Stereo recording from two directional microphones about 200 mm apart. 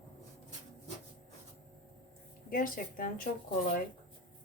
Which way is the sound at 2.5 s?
45° left (ahead or behind).